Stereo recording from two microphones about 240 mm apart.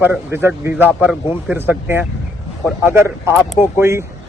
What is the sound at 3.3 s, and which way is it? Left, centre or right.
Speech, centre.